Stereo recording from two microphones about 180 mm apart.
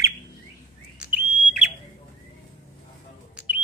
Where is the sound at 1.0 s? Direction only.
5° right (ahead or behind).